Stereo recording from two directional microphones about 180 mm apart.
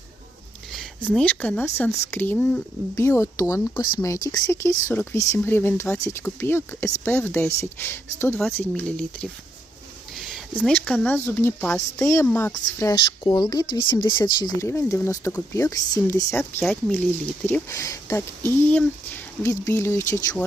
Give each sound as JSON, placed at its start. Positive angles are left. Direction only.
{"t": 0.7, "sound": "speech", "side_deg": 5}
{"t": 10.2, "sound": "a sound", "side_deg": 0}
{"t": 11.0, "sound": "speech", "side_deg": 10}